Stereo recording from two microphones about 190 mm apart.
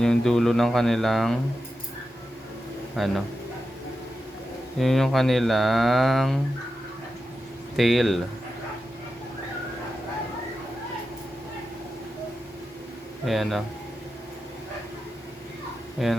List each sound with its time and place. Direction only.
0.0 s speech: 5° left (ahead or behind)
3.0 s speech: centre (ahead or behind)
4.8 s speech: centre (ahead or behind)
7.8 s speech: centre (ahead or behind)
13.2 s speech: centre (ahead or behind)
16.0 s speech: centre (ahead or behind)